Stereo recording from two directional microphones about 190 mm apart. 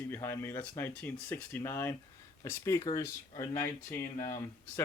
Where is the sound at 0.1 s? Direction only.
15° left (ahead or behind).